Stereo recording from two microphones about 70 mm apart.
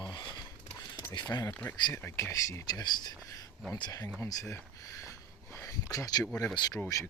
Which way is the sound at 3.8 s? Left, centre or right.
Left.